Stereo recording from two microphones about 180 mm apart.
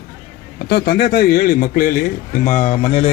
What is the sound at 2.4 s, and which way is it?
Speech, 40° left (ahead or behind).